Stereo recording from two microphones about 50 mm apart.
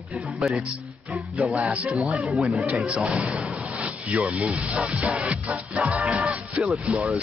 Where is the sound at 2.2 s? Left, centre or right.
Centre.